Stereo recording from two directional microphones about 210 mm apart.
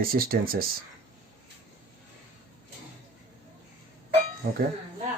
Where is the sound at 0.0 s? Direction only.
45° right (ahead or behind).